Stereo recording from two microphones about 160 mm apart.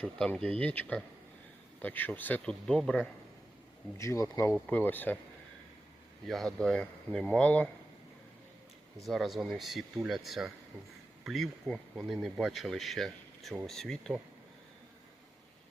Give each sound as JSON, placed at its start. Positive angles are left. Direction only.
{"t": 0.0, "sound": "speech", "side_deg": 5}
{"t": 3.9, "sound": "speech", "side_deg": 20}
{"t": 4.5, "sound": "speech", "side_deg": 5}
{"t": 6.2, "sound": "speech", "side_deg": 0}
{"t": 9.0, "sound": "speech", "side_deg": 0}